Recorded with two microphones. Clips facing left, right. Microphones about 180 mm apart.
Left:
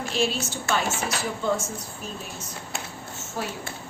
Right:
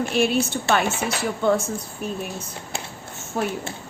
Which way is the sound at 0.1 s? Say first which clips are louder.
Right 3 dB; 60° right (ahead or behind).